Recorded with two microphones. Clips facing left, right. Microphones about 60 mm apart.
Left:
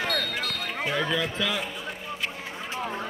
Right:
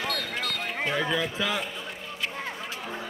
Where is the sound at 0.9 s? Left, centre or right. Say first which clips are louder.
Left 1 dB; centre.